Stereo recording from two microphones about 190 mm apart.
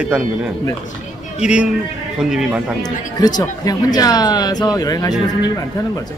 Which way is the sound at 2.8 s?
20° left (ahead or behind).